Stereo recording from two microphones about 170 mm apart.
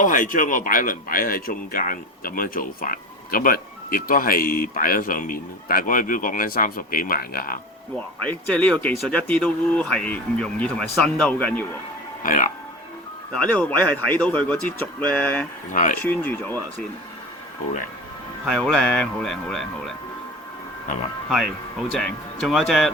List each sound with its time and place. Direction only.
0.0 s speech: 50° left (ahead or behind)
8.2 s speech: 5° left (ahead or behind)
12.2 s speech: 55° left (ahead or behind)
13.3 s speech: 10° left (ahead or behind)
15.7 s speech: 50° left (ahead or behind)
16.0 s speech: 10° left (ahead or behind)
18.4 s speech: 5° left (ahead or behind)
21.9 s speech: centre (ahead or behind)